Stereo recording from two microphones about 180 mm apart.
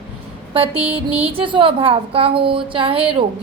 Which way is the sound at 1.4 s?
30° right (ahead or behind).